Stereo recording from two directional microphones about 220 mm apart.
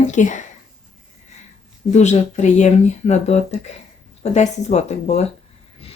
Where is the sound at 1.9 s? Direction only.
30° left (ahead or behind).